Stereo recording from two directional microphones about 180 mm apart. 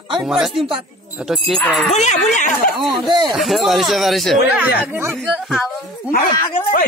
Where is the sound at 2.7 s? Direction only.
Centre (ahead or behind).